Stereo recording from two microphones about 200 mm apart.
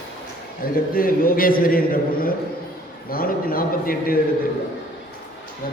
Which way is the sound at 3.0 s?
45° left (ahead or behind).